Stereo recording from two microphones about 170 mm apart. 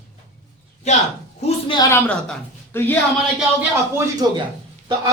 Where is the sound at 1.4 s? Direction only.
35° left (ahead or behind).